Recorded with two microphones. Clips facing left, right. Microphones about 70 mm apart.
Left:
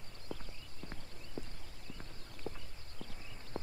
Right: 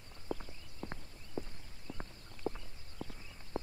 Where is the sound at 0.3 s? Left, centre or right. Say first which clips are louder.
Right 5 dB; centre.